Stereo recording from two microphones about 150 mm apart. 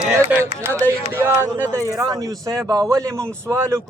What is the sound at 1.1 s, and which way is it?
Speech, 15° right (ahead or behind).